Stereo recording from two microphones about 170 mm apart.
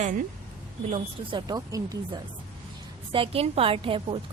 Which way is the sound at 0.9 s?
30° right (ahead or behind).